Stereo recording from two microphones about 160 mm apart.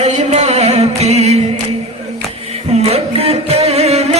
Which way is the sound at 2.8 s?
40° right (ahead or behind).